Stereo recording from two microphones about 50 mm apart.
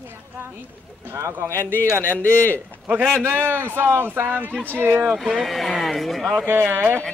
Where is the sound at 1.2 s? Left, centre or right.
Right.